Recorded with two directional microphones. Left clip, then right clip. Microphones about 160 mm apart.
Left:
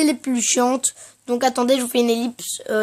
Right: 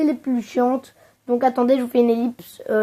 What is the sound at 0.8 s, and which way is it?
Speech, 15° left (ahead or behind).